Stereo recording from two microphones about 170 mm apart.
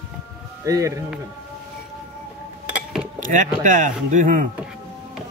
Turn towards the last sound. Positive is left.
turn(degrees=-50)  # may be behind; listen again after turning